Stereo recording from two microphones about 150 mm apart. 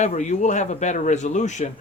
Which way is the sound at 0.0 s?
50° left (ahead or behind).